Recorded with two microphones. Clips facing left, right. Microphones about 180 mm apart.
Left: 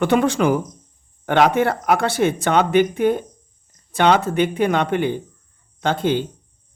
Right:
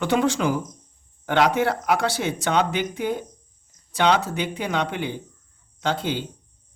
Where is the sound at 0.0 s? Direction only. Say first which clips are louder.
Left 4 dB; 55° left (ahead or behind).